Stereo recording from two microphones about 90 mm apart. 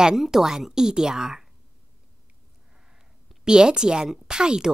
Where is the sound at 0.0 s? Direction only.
5° right (ahead or behind).